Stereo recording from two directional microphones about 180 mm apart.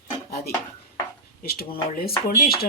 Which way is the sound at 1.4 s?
60° left (ahead or behind).